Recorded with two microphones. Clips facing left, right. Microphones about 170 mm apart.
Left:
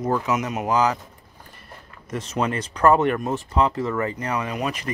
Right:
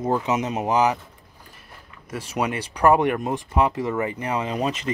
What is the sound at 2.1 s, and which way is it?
Speech, 10° right (ahead or behind).